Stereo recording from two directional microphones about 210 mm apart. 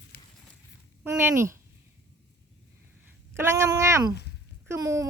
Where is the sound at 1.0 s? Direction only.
10° right (ahead or behind).